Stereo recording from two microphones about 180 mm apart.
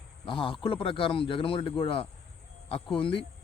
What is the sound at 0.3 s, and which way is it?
Speech, 30° left (ahead or behind).